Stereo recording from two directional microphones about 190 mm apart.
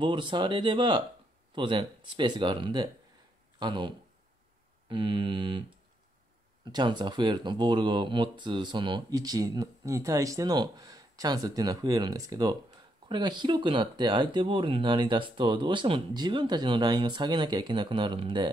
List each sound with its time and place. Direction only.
0.0 s speech: 25° right (ahead or behind)